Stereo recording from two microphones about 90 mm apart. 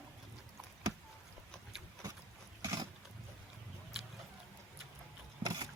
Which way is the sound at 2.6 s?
40° right (ahead or behind).